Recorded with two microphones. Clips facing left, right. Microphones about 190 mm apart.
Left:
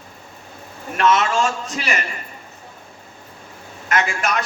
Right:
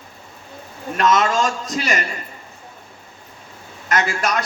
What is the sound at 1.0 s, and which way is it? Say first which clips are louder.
A man's voice: even; 40° right (ahead or behind).